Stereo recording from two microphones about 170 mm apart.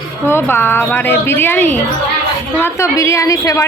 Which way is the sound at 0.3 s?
15° left (ahead or behind).